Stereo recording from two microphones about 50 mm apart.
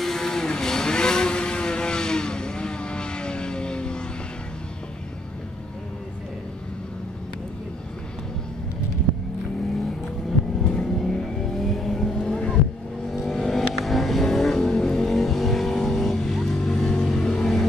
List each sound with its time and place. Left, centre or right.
0.0 s vehicle: centre
10.6 s vehicle: centre
13.1 s vehicle: centre